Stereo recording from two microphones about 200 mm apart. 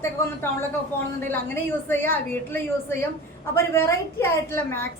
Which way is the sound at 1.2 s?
10° left (ahead or behind).